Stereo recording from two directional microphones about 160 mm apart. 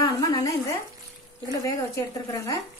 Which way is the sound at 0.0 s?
25° left (ahead or behind).